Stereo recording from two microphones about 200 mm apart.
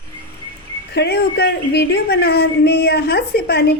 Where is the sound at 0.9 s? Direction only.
55° left (ahead or behind).